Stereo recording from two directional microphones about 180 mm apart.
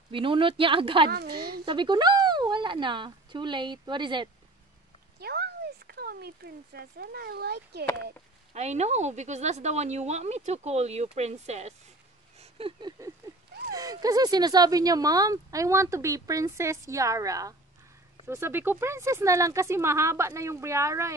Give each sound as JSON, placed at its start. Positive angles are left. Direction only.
{"t": 0.1, "sound": "speech", "side_deg": -30}
{"t": 5.2, "sound": "speech", "side_deg": -65}
{"t": 8.5, "sound": "speech", "side_deg": -40}
{"t": 13.7, "sound": "speech", "side_deg": -20}